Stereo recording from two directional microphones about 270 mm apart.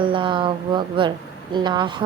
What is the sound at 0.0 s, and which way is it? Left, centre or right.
Speech, centre.